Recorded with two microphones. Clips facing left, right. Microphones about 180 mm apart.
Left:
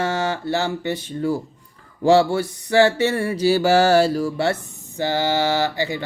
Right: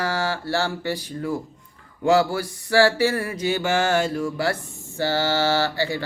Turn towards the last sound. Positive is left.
turn(degrees=20)  # may be behind; listen again after turning